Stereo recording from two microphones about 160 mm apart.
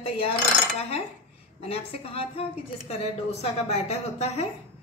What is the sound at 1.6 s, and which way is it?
A woman's voice, 35° left (ahead or behind).